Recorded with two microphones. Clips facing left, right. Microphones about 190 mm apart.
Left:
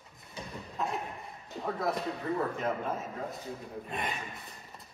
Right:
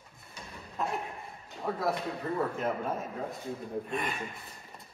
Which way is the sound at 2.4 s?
Centre (ahead or behind).